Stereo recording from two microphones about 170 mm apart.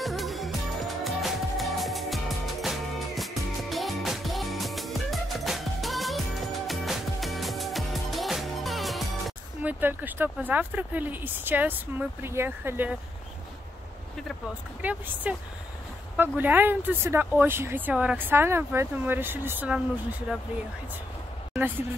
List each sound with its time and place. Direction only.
0.0 s music: centre (ahead or behind)
14.8 s speech: 10° right (ahead or behind)
21.5 s speech: 10° right (ahead or behind)